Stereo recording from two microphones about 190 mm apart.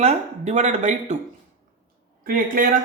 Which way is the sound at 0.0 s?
35° right (ahead or behind).